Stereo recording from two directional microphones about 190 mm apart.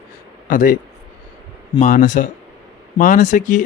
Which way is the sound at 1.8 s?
40° left (ahead or behind).